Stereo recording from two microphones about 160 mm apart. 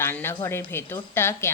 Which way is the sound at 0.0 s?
15° left (ahead or behind).